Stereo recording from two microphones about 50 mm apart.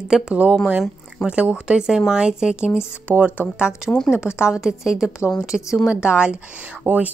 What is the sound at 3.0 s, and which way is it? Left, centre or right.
Speech, right.